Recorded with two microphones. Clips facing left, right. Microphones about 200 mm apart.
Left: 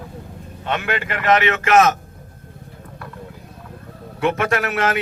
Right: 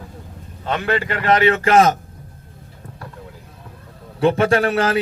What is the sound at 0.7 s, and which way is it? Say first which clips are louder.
Speech: right 3 dB; 35° right (ahead or behind).